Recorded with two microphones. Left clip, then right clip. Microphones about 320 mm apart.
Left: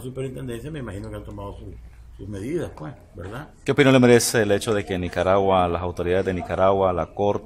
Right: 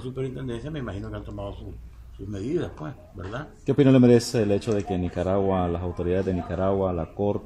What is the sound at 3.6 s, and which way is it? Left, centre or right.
Speech, left.